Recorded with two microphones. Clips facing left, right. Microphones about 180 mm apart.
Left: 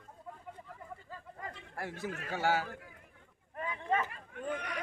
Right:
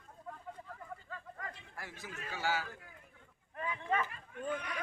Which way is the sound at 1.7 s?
60° left (ahead or behind).